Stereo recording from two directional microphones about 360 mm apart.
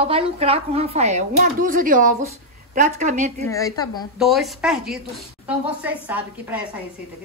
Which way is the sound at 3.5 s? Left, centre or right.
Centre.